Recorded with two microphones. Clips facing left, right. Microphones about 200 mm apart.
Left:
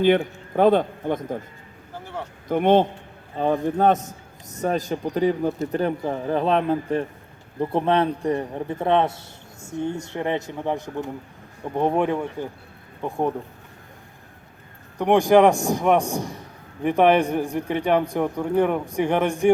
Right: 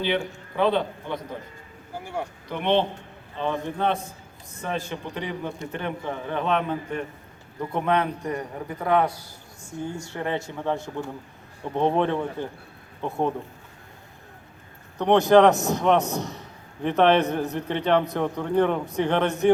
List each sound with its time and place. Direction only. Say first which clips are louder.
0.0 s a man's voice: left 8 dB; 50° left (ahead or behind)
2.5 s a man's voice: left 6 dB; 45° left (ahead or behind); by 13.3 s 15° left (ahead or behind)
14.9 s a man's voice: left 1 dB; 10° left (ahead or behind)